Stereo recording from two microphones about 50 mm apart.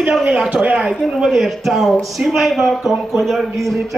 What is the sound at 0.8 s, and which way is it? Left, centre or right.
A man's voice, centre.